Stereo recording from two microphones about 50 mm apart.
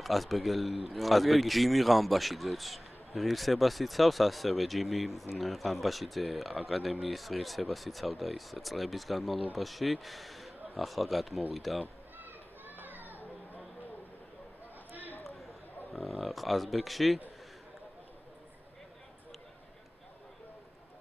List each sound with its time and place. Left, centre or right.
0.0 s a man's voice: centre
12.2 s children playing: right
15.2 s a man's voice: centre